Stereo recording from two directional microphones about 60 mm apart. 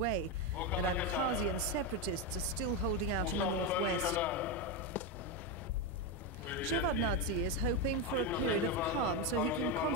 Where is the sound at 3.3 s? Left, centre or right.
Left.